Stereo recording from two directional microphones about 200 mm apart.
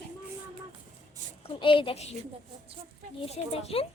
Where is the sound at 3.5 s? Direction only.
30° left (ahead or behind).